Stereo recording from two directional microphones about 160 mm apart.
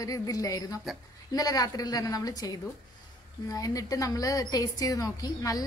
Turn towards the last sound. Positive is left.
turn(degrees=20)  # may be behind; listen again after turning